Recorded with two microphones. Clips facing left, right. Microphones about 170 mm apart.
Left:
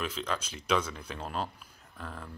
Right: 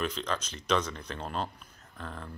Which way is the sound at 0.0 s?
5° left (ahead or behind).